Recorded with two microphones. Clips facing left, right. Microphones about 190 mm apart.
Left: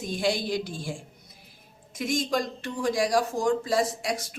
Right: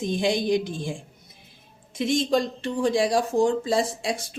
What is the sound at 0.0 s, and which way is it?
A woman's voice, 20° right (ahead or behind).